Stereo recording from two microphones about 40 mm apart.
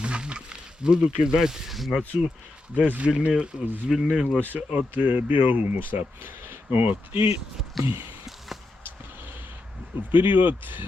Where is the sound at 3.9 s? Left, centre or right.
Centre.